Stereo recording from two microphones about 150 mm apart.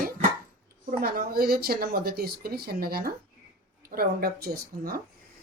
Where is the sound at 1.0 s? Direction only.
90° right.